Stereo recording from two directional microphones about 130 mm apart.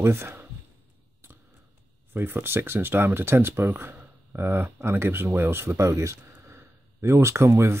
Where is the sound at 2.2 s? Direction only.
15° right (ahead or behind).